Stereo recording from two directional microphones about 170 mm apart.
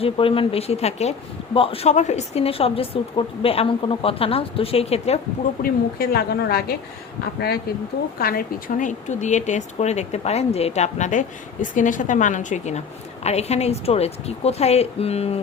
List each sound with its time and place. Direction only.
0.0 s a woman's voice: 30° left (ahead or behind)
5.6 s a woman's voice: 60° left (ahead or behind); by 15.4 s 35° left (ahead or behind)